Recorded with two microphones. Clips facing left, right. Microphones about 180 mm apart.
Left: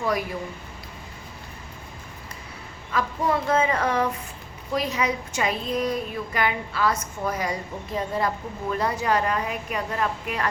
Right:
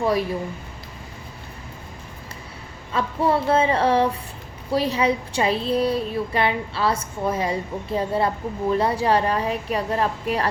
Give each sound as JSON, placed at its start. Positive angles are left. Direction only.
{"t": 0.0, "sound": "speech", "side_deg": -30}
{"t": 2.9, "sound": "a woman's voice", "side_deg": -30}